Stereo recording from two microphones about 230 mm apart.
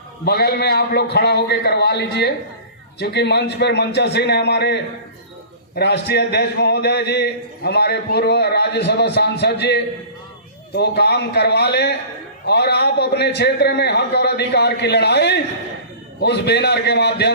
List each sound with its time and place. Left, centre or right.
0.3 s a man's voice: left